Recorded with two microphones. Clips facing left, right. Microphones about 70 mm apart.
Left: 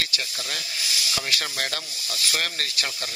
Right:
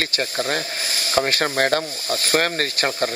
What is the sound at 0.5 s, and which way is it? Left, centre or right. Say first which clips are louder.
Speech: right 8 dB; right.